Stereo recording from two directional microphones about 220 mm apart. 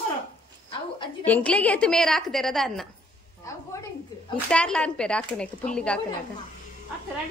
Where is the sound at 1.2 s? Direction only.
5° left (ahead or behind).